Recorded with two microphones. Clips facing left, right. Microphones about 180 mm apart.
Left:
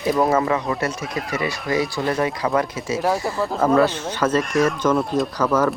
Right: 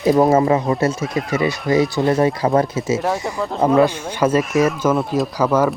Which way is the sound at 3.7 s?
10° right (ahead or behind).